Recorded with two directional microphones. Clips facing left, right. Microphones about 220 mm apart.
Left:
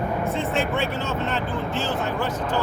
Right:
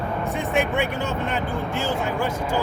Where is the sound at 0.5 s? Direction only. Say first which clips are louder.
Right 5 dB; 15° right (ahead or behind).